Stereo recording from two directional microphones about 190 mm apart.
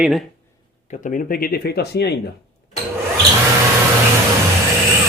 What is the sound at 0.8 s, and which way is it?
Speech, 45° left (ahead or behind).